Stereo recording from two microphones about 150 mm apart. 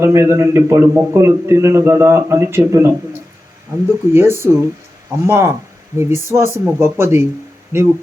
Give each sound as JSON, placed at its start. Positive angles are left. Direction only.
{"t": 0.0, "sound": "a man's voice", "side_deg": -20}
{"t": 4.1, "sound": "a man's voice", "side_deg": -15}